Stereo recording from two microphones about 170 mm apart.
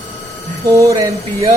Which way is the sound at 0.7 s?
20° right (ahead or behind).